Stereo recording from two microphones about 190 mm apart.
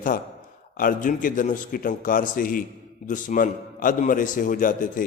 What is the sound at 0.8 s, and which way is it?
A man's voice, 45° left (ahead or behind).